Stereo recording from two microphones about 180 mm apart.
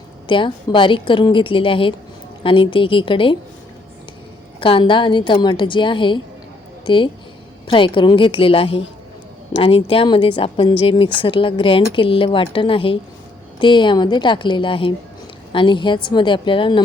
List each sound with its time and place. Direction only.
0.3 s speech: 25° left (ahead or behind)
4.6 s speech: 30° left (ahead or behind)